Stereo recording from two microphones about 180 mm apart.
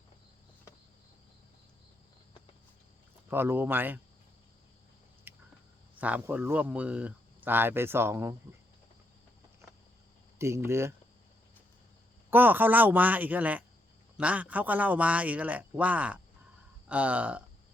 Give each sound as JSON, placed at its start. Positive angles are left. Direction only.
{"t": 3.2, "sound": "speech", "side_deg": -10}
{"t": 5.3, "sound": "a sound", "side_deg": -10}
{"t": 6.0, "sound": "speech", "side_deg": -10}
{"t": 10.3, "sound": "speech", "side_deg": -15}
{"t": 12.3, "sound": "speech", "side_deg": -10}